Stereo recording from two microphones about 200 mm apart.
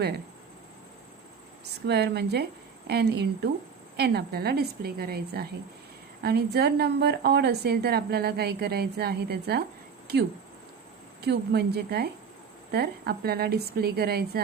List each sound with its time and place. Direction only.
1.9 s a woman's voice: 55° right (ahead or behind)